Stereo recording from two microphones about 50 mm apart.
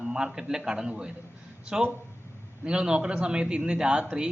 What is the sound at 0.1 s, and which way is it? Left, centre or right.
A woman's voice, centre.